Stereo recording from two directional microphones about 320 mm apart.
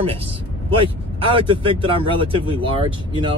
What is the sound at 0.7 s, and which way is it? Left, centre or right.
Speech, centre.